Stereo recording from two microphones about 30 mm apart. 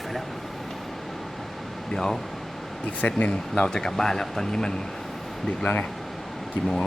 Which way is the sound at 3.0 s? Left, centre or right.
Left.